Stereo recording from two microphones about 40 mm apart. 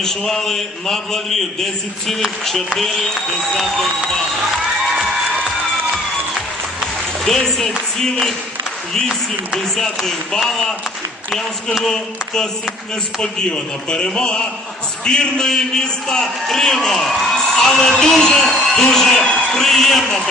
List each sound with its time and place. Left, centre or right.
0.0 s a man's voice: centre
7.3 s a man's voice: centre
11.8 s a man's voice: centre
13.9 s a man's voice: left